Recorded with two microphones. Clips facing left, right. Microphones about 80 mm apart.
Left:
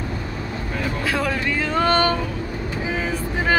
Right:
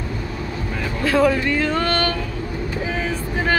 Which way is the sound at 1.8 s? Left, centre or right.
Centre.